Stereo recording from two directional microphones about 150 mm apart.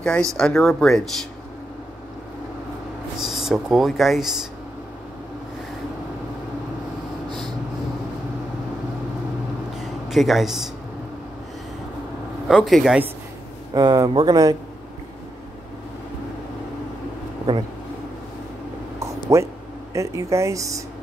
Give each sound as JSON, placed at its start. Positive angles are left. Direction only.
{"t": 0.0, "sound": "speech", "side_deg": 5}
{"t": 3.2, "sound": "speech", "side_deg": 0}
{"t": 7.2, "sound": "vehicle", "side_deg": -30}
{"t": 9.8, "sound": "a sound", "side_deg": 0}
{"t": 12.4, "sound": "speech", "side_deg": 0}
{"t": 13.7, "sound": "speech", "side_deg": -25}
{"t": 18.9, "sound": "a sound", "side_deg": -20}
{"t": 19.9, "sound": "speech", "side_deg": -20}